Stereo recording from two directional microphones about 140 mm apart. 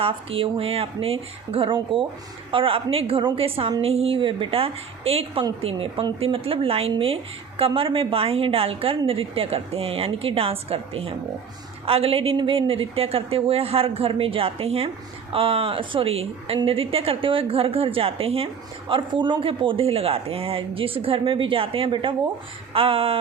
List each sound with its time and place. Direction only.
0.0 s a woman's voice: 40° right (ahead or behind)